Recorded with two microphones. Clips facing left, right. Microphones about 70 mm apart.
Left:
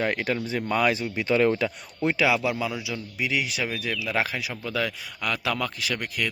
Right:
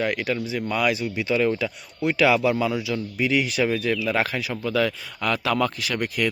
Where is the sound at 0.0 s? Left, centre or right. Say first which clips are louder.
Right 1 dB; left.